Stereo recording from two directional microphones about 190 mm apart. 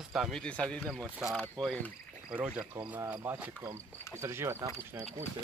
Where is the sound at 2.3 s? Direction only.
10° right (ahead or behind).